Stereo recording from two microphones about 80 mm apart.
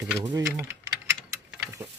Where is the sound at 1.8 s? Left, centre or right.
Right.